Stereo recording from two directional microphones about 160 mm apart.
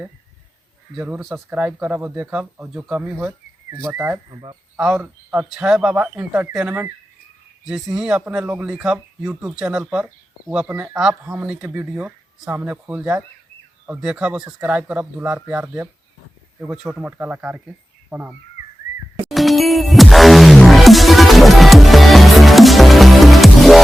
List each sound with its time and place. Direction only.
0.9 s speech: 10° right (ahead or behind)
4.3 s speech: 30° right (ahead or behind)
5.0 s speech: 5° right (ahead or behind)
7.9 s a man's voice: 5° right (ahead or behind)
19.3 s music: centre (ahead or behind)